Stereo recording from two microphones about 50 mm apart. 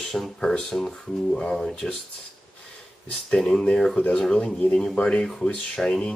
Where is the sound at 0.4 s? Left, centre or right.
Centre.